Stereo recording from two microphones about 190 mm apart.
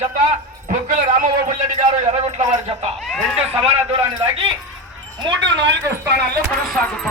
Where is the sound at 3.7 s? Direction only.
30° right (ahead or behind).